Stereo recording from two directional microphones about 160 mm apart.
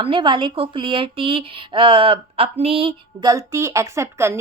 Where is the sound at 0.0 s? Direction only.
30° right (ahead or behind).